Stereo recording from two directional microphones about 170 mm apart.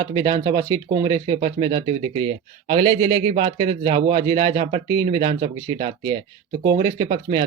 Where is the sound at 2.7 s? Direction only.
30° right (ahead or behind).